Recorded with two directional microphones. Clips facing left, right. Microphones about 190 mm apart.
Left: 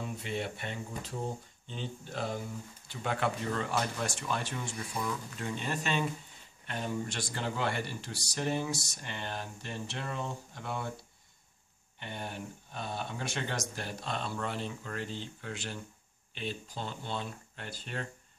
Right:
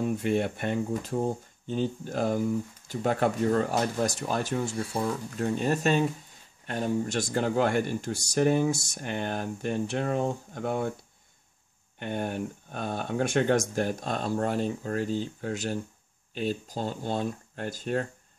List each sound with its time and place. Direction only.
0.0 s speech: 50° right (ahead or behind)
12.0 s speech: 50° right (ahead or behind)